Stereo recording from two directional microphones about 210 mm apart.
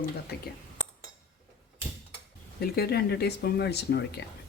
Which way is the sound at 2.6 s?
50° left (ahead or behind).